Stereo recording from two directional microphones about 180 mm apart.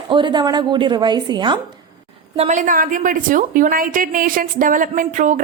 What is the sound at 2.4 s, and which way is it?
A woman's voice, 40° right (ahead or behind).